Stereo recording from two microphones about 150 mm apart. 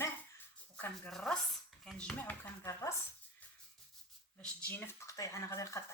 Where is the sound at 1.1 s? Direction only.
Centre (ahead or behind); by 2.9 s 20° left (ahead or behind).